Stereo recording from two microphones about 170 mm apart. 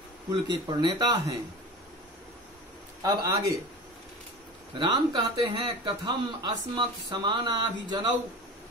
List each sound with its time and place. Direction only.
0.3 s speech: 25° right (ahead or behind)
3.0 s speech: 20° right (ahead or behind)
4.7 s speech: 25° right (ahead or behind)